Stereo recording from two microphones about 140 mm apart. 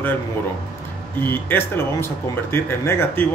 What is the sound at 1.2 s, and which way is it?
Speech, 15° left (ahead or behind).